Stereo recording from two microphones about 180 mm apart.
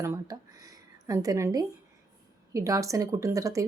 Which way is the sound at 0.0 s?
15° right (ahead or behind).